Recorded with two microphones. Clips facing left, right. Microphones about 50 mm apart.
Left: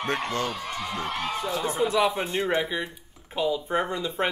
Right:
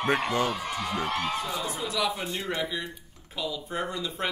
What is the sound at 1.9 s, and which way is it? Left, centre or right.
Speech, left.